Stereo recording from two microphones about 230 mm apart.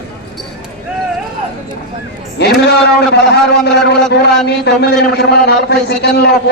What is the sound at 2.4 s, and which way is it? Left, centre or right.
A man's voice, left.